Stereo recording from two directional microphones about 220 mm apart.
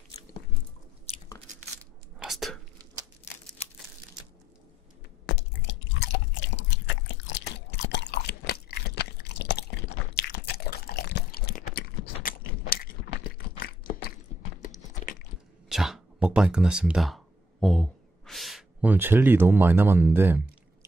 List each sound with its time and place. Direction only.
2.1 s whispering: centre (ahead or behind)
5.2 s drip: 55° left (ahead or behind)
10.1 s crunch: 45° left (ahead or behind)
15.7 s a sound: centre (ahead or behind)